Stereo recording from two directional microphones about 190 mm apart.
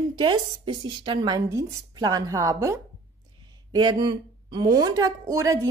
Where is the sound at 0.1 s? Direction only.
25° right (ahead or behind).